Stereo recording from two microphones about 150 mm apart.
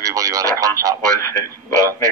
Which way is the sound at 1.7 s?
25° right (ahead or behind).